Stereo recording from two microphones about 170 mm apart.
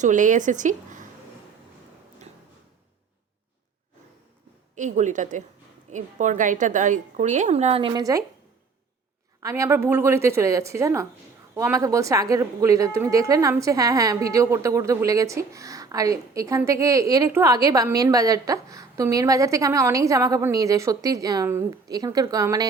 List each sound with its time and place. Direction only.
0.0 s a woman's voice: 50° right (ahead or behind)
4.7 s a woman's voice: 45° right (ahead or behind); by 8.2 s 25° right (ahead or behind)
9.4 s a woman's voice: 20° right (ahead or behind)